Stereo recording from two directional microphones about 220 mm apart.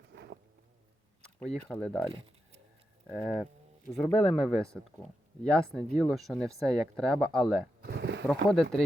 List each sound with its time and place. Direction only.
0.1 s insect: 55° right (ahead or behind)
1.2 s speech: 5° left (ahead or behind)
2.0 s a sound: 25° right (ahead or behind)
3.1 s speech: 5° left (ahead or behind)
7.8 s a sound: 50° right (ahead or behind)
8.3 s speech: centre (ahead or behind)